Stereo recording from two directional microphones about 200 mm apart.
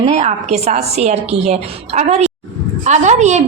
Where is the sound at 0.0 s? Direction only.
35° right (ahead or behind).